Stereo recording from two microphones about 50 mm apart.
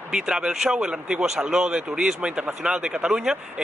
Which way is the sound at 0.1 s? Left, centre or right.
Centre.